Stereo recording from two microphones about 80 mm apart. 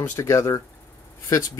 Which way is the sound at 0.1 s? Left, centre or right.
Left.